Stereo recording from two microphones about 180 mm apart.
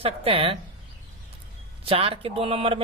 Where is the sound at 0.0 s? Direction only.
30° right (ahead or behind).